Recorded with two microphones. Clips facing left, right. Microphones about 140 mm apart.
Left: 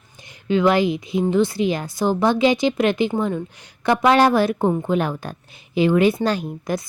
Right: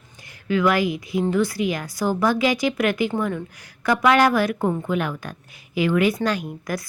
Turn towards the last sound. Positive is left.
turn(degrees=25)  # may be behind; listen again after turning